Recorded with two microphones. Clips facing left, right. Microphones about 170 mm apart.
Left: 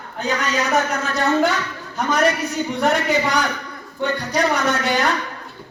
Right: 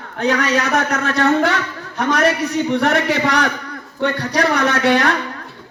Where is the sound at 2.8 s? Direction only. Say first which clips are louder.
Right 2 dB; 65° right (ahead or behind).